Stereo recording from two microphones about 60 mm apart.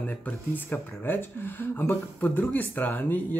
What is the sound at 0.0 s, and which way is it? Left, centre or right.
Speech, left.